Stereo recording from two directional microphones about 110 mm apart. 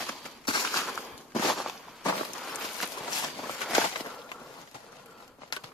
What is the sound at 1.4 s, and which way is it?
Walk, centre (ahead or behind).